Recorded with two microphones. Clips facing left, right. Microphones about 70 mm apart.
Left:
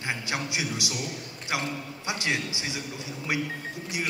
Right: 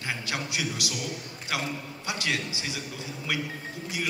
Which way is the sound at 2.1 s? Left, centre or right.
Left.